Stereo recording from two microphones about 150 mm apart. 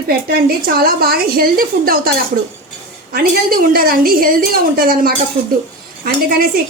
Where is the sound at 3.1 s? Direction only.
75° right (ahead or behind).